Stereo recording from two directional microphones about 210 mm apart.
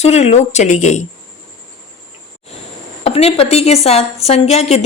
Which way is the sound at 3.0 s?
30° left (ahead or behind).